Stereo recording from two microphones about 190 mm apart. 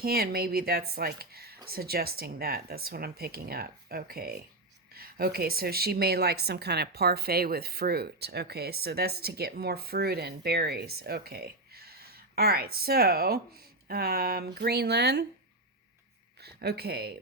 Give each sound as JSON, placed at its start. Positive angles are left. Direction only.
{"t": 0.0, "sound": "a woman's voice", "side_deg": -55}
{"t": 16.4, "sound": "speech", "side_deg": -60}